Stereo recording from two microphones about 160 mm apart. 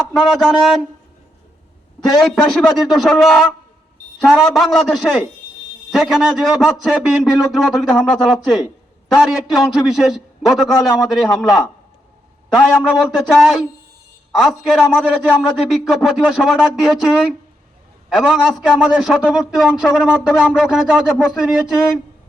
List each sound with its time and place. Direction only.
0.1 s a man's voice: centre (ahead or behind)
2.0 s a man's voice: centre (ahead or behind)
13.1 s a man's voice: centre (ahead or behind)
18.1 s a man's voice: centre (ahead or behind)